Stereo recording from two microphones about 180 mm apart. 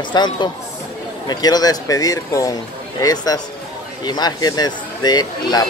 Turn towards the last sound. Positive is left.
turn(degrees=20)  # may be behind; listen again after turning